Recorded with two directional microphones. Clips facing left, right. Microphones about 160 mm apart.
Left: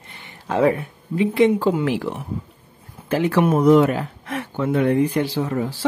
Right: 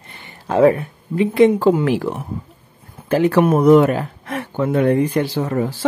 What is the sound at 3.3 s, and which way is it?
Speech, 55° right (ahead or behind).